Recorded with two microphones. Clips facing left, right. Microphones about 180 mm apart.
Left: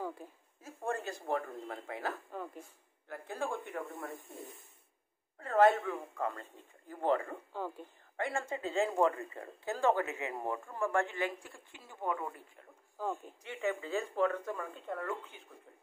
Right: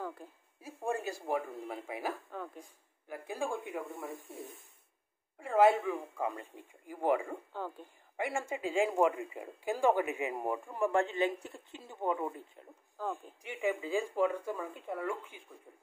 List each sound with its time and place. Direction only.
0.0 s a sound: 10° left (ahead or behind)
0.6 s speech: 10° right (ahead or behind)
2.3 s speech: 5° left (ahead or behind)
2.6 s speech: 10° right (ahead or behind)
3.8 s speech: centre (ahead or behind)
7.5 s speech: 10° left (ahead or behind)
8.2 s speech: 10° right (ahead or behind)